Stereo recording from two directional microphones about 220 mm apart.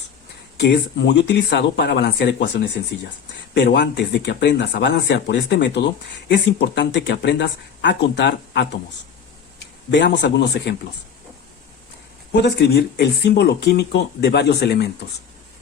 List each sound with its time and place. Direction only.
0.6 s speech: 50° left (ahead or behind)
12.3 s speech: 50° left (ahead or behind)